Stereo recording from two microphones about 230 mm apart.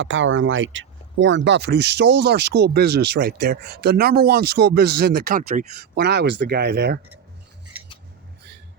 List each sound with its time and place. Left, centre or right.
0.0 s speech: right
5.9 s speech: right